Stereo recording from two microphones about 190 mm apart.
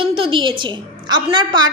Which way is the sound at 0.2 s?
25° right (ahead or behind).